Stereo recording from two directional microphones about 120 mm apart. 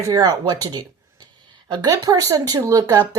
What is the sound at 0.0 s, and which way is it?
Speech, 30° right (ahead or behind).